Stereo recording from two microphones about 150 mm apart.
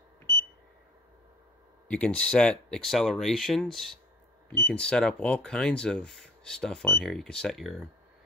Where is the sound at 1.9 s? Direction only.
10° left (ahead or behind).